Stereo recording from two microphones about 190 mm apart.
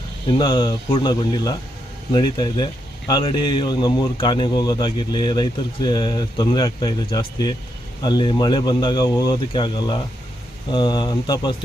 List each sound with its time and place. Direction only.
0.3 s a man's voice: 25° left (ahead or behind)